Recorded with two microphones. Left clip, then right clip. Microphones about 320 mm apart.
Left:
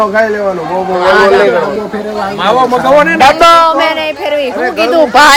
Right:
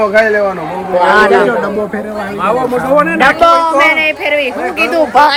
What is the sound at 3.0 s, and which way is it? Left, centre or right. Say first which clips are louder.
Speech: left 2 dB; left.